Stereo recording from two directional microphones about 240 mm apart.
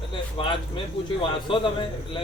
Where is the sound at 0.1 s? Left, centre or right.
Left.